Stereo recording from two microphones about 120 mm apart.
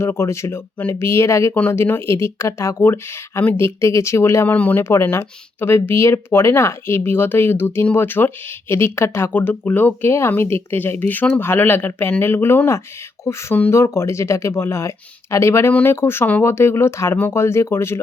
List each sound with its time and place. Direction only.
0.0 s speech: 25° left (ahead or behind)